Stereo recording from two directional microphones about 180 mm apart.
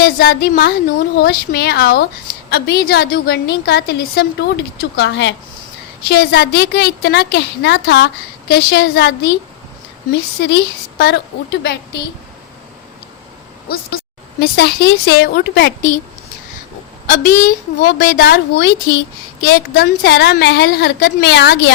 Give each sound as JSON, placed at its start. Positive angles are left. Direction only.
{"t": 0.0, "sound": "a woman's voice", "side_deg": 60}
{"t": 6.1, "sound": "a woman's voice", "side_deg": 65}
{"t": 13.7, "sound": "a woman's voice", "side_deg": 55}
{"t": 17.1, "sound": "a woman's voice", "side_deg": 45}